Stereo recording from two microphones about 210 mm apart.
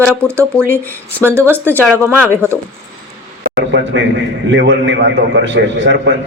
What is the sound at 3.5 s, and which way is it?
A man's voice, 60° right (ahead or behind).